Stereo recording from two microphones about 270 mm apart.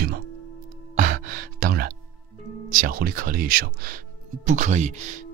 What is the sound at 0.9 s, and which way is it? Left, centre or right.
Sigh, right.